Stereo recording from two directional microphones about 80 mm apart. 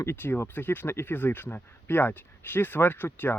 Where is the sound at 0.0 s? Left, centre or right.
Left.